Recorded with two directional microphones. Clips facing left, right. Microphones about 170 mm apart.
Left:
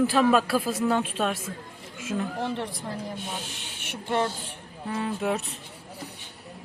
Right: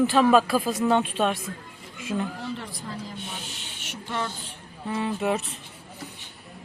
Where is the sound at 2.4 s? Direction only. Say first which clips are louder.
Left 4 dB; 65° left (ahead or behind).